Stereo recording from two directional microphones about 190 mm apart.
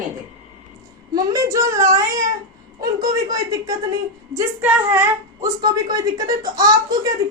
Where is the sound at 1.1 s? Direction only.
15° right (ahead or behind).